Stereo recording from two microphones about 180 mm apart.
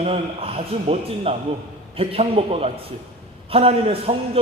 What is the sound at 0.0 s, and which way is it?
A man's voice, 35° right (ahead or behind).